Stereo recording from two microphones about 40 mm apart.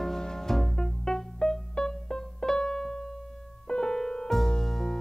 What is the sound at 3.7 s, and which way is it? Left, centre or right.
Music, centre.